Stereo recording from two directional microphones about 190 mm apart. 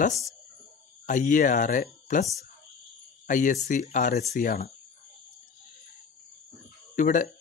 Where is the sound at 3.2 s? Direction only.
45° left (ahead or behind).